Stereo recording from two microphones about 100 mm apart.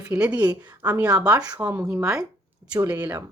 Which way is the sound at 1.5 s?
15° right (ahead or behind).